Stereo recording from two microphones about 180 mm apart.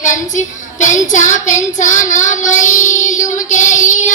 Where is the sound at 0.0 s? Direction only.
45° left (ahead or behind).